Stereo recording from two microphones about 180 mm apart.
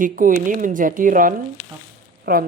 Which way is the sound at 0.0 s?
45° right (ahead or behind).